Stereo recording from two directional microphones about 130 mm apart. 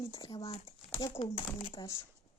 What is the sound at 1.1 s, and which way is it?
Speech, 45° left (ahead or behind).